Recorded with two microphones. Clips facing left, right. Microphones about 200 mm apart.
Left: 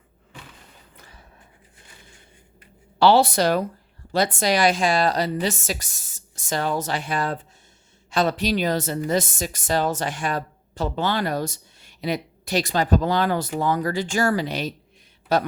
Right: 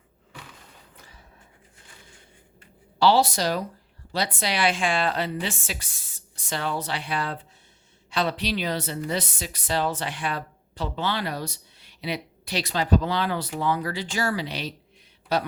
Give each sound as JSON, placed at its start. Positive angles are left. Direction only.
{"t": 3.0, "sound": "speech", "side_deg": 60}